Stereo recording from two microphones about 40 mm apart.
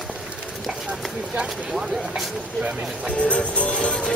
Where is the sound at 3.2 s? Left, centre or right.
Left.